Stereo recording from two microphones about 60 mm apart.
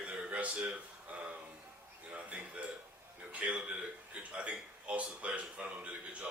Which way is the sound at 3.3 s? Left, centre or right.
Right.